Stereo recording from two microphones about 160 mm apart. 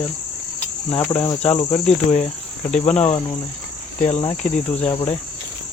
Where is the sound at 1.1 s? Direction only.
30° left (ahead or behind).